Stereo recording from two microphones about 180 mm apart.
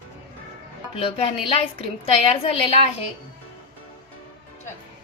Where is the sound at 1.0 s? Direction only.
30° left (ahead or behind).